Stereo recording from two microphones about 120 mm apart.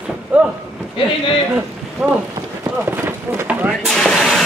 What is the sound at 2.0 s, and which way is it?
Speech, 10° right (ahead or behind).